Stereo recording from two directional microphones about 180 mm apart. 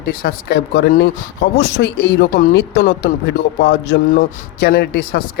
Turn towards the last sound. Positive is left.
turn(degrees=55)  # may be behind; listen again after turning